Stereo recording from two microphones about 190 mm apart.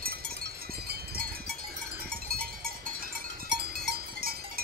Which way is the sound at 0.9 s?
60° right (ahead or behind).